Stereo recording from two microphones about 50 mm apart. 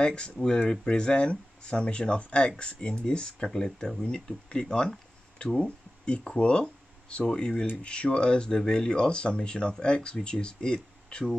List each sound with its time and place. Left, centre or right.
0.0 s speech: centre